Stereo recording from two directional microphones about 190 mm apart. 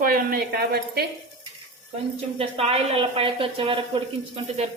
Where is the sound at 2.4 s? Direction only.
30° right (ahead or behind).